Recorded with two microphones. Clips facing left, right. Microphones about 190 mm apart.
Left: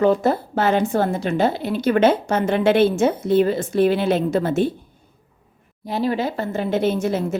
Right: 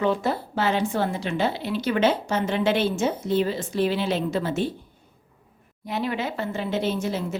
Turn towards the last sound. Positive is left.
turn(degrees=50)  # may be behind; listen again after turning